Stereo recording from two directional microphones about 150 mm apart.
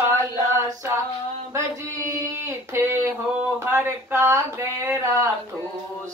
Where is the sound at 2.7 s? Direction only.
20° right (ahead or behind).